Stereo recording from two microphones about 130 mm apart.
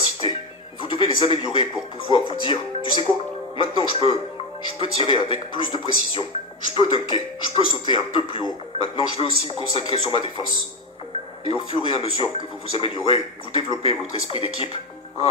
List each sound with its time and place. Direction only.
0.2 s music: 45° left (ahead or behind)
0.8 s speech: 40° left (ahead or behind)
11.4 s speech: 45° left (ahead or behind)